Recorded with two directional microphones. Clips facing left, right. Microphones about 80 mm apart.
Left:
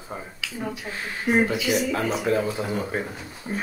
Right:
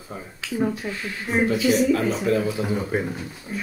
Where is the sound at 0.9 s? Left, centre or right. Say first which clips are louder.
Left 2 dB; left.